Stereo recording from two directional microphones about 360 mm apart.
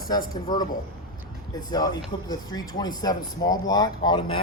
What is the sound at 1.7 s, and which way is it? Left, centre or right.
Speech, centre.